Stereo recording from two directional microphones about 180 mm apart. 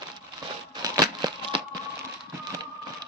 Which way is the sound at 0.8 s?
20° right (ahead or behind).